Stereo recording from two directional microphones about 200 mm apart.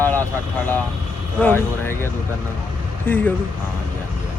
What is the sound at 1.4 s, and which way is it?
Speech, 10° left (ahead or behind).